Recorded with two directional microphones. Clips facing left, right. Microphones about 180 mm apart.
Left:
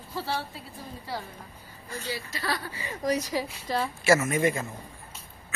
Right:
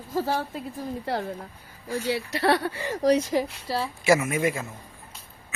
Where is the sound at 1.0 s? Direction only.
60° right (ahead or behind).